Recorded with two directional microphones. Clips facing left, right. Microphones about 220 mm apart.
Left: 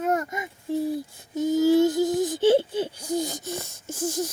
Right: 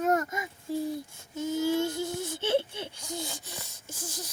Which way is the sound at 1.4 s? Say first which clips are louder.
Left 9 dB; 40° left (ahead or behind).